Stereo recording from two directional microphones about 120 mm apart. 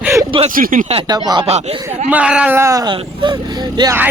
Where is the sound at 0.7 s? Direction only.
90° right.